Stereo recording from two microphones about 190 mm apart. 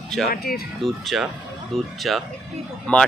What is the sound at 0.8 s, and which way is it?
Speech, centre (ahead or behind).